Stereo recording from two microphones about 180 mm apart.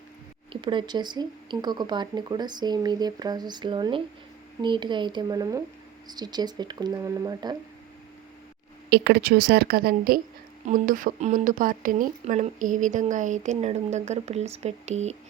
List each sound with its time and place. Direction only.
0.5 s speech: 25° right (ahead or behind)
8.9 s a woman's voice: 65° right (ahead or behind); by 15.1 s 40° right (ahead or behind)